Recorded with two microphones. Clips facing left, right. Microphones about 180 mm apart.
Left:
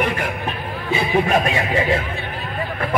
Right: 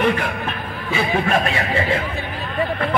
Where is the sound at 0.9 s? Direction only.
15° left (ahead or behind).